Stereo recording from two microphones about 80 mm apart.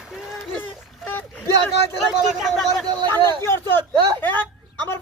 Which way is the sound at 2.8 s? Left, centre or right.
Right.